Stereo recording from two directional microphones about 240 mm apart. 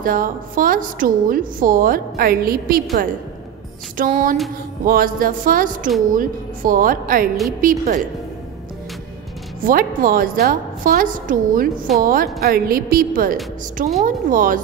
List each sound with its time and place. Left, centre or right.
0.0 s a woman's voice: right
9.6 s a woman's voice: right